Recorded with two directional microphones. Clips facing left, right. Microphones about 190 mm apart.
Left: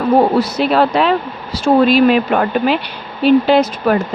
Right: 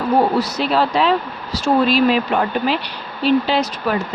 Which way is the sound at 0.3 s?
55° left (ahead or behind).